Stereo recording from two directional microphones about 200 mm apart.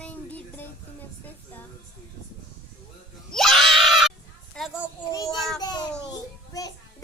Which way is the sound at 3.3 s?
Centre (ahead or behind).